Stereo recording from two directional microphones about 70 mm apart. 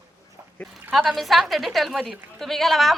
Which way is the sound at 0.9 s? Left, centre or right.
Centre.